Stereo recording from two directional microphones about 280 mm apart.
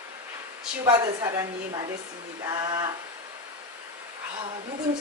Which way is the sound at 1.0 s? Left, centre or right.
Centre.